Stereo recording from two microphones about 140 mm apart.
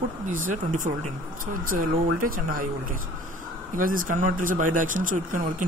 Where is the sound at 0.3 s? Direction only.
70° right (ahead or behind).